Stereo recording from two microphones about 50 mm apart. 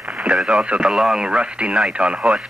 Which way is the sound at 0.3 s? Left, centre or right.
Centre.